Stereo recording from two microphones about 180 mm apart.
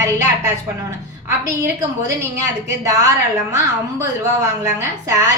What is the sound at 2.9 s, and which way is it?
Speech, 20° right (ahead or behind).